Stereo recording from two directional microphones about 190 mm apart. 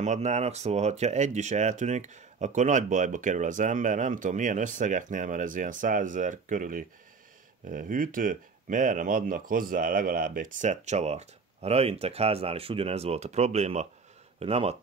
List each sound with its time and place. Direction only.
0.0 s speech: 35° right (ahead or behind)